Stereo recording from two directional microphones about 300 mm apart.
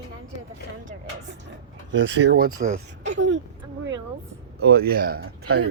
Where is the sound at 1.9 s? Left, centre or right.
Right.